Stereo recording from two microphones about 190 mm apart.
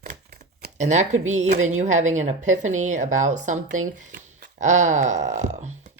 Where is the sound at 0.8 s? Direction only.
40° right (ahead or behind).